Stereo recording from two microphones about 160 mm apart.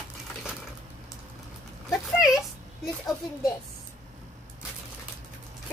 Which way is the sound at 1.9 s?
Centre (ahead or behind).